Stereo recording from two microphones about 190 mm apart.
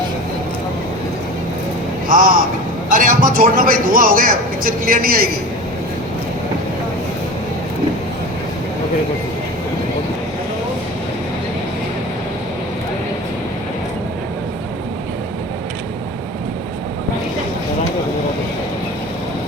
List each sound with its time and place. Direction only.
2.0 s a man's voice: 50° right (ahead or behind)